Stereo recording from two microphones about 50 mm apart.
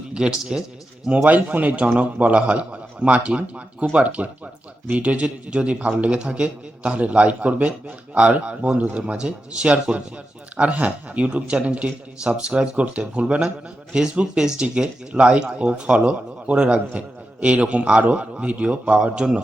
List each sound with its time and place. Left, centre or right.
0.1 s a man's voice: centre
1.1 s a man's voice: right